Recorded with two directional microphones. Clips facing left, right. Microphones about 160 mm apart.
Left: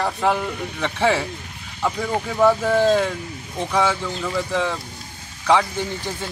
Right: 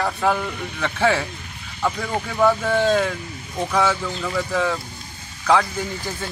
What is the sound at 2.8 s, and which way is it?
Speech, 20° left (ahead or behind).